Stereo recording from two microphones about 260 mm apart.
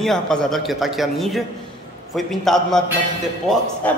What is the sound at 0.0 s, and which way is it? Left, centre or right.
Speech, centre.